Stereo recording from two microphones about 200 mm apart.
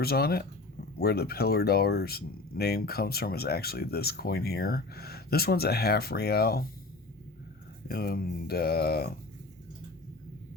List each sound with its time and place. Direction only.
0.0 s speech: 50° left (ahead or behind)
7.9 s speech: 50° left (ahead or behind)